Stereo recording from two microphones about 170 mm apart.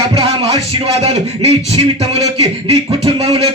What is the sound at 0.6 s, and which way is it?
Speech, 35° right (ahead or behind).